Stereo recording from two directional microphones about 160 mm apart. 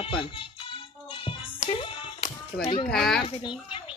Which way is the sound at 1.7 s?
30° left (ahead or behind).